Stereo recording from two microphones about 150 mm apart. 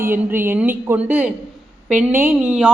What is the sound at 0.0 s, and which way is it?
A woman's voice, 15° right (ahead or behind).